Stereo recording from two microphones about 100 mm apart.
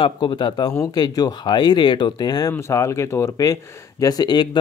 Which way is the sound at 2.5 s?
30° left (ahead or behind).